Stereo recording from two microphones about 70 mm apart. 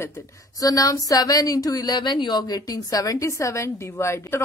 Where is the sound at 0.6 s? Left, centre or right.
Left.